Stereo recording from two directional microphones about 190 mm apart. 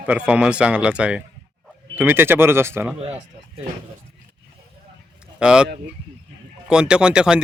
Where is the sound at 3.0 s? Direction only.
30° right (ahead or behind).